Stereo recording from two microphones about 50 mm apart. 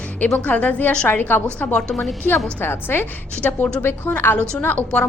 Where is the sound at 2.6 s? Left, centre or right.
Left.